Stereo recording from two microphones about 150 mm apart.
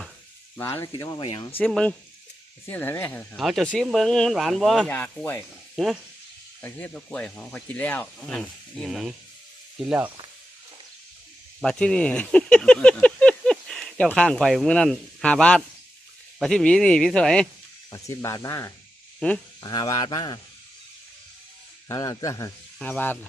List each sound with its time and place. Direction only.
0.5 s speech: 15° left (ahead or behind); by 1.5 s 30° left (ahead or behind)
1.5 s speech: 5° left (ahead or behind)
3.3 s speech: centre (ahead or behind)
4.9 s speech: 10° left (ahead or behind)
5.7 s speech: centre (ahead or behind)
6.6 s speech: 15° left (ahead or behind); by 10.1 s 5° right (ahead or behind)
11.6 s speech: 5° left (ahead or behind)
17.9 s speech: 20° left (ahead or behind)
21.8 s speech: 25° left (ahead or behind)
22.8 s speech: 10° left (ahead or behind)